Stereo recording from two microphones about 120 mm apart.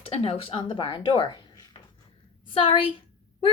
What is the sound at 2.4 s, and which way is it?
Speech, 45° left (ahead or behind).